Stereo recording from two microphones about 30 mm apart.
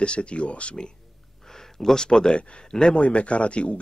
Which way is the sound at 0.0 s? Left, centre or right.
Left.